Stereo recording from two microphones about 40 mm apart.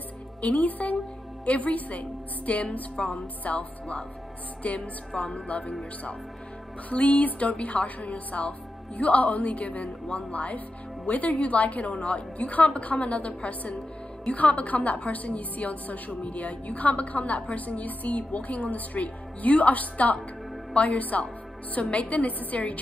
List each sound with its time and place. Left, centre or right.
0.4 s a woman's voice: left
4.6 s a woman's voice: left
6.9 s a woman's voice: left